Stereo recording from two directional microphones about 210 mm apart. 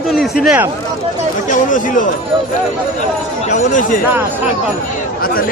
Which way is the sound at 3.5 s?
35° left (ahead or behind).